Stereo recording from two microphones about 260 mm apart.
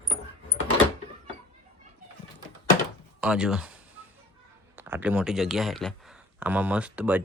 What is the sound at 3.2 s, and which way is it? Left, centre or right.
Speech, centre.